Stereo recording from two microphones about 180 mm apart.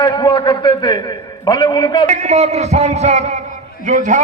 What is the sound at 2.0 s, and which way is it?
A man's voice, 40° right (ahead or behind).